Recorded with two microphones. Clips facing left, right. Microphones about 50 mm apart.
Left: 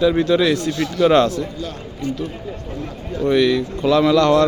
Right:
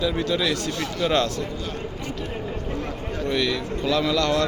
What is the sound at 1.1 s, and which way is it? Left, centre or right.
Speech, left.